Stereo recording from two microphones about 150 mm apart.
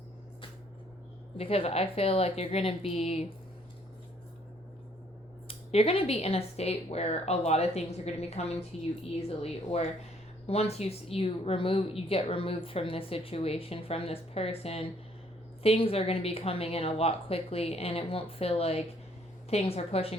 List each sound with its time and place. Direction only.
1.4 s speech: 40° left (ahead or behind)
5.5 s speech: 40° left (ahead or behind)